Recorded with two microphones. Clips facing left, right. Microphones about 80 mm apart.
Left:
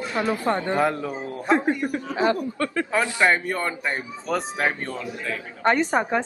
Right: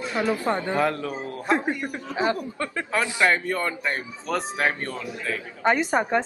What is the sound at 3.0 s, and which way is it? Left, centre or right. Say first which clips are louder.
A man's voice: left 1 dB; centre.